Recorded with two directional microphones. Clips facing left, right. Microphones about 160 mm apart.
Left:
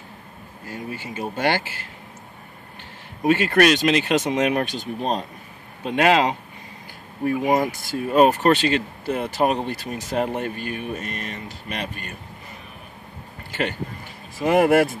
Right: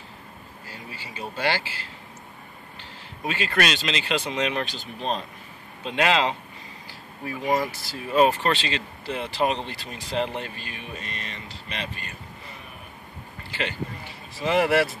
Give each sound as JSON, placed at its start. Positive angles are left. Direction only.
{"t": 0.7, "sound": "speech", "side_deg": 50}
{"t": 3.3, "sound": "speech", "side_deg": 50}
{"t": 5.9, "sound": "speech", "side_deg": 45}
{"t": 7.3, "sound": "speech", "side_deg": 20}
{"t": 7.8, "sound": "speech", "side_deg": 50}
{"t": 13.5, "sound": "speech", "side_deg": 50}